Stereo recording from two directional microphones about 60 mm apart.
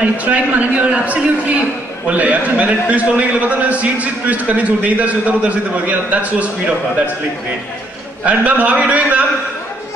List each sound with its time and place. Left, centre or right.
0.0 s a man's voice: right
8.2 s a man's voice: right